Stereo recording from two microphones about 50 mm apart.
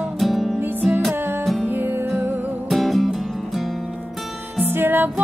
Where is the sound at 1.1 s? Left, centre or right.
Right.